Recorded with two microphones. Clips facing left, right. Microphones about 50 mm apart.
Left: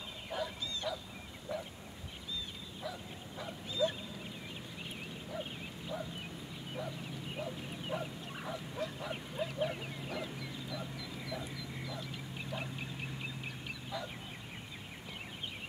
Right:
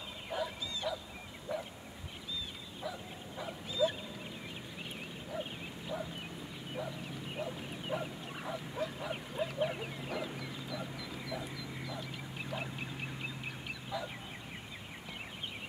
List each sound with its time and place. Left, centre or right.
0.3 s bow-wow: centre
1.5 s a sound: centre
2.8 s bow-wow: centre
5.3 s bow-wow: centre
7.3 s bow-wow: centre
13.8 s fowl: centre